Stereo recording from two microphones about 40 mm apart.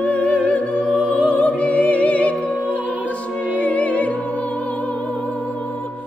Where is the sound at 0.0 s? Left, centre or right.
Left.